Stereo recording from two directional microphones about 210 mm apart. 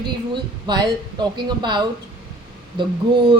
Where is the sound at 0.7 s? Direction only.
20° right (ahead or behind).